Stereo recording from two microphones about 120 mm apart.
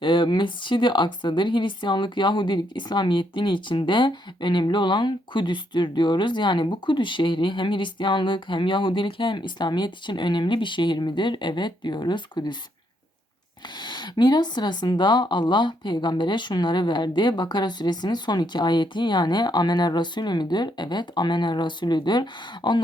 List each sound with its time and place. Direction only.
0.0 s a woman's voice: 40° left (ahead or behind)
13.7 s a woman's voice: 40° left (ahead or behind)